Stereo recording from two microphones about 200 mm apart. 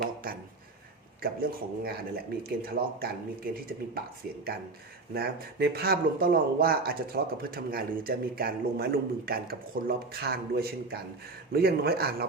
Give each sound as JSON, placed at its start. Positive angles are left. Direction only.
{"t": 1.2, "sound": "speech", "side_deg": -50}
{"t": 5.1, "sound": "speech", "side_deg": -50}